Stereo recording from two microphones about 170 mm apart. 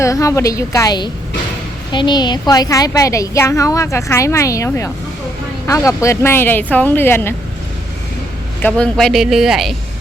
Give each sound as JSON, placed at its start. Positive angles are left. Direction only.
{"t": 0.0, "sound": "a woman's voice", "side_deg": 20}
{"t": 8.6, "sound": "speech", "side_deg": 5}